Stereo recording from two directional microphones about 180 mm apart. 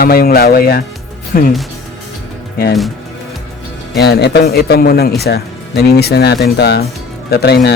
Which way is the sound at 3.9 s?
65° left (ahead or behind).